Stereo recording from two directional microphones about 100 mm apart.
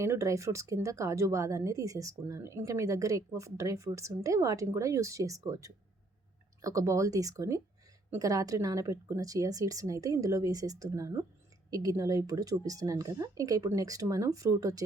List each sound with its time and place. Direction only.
0.0 s speech: 30° right (ahead or behind)